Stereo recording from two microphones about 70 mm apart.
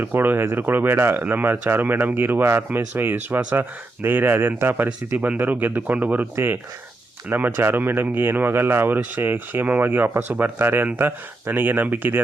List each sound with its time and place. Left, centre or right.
0.0 s speech: right
4.9 s speech: centre